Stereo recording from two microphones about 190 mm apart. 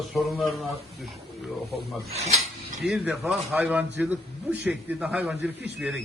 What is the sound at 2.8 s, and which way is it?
A man's voice, 5° right (ahead or behind).